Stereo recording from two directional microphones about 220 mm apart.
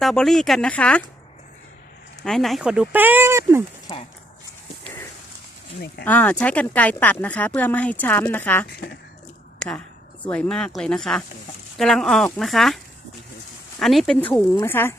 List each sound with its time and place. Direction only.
0.0 s speech: centre (ahead or behind)
2.2 s speech: centre (ahead or behind)
3.9 s speech: 20° left (ahead or behind)
6.1 s speech: 10° left (ahead or behind)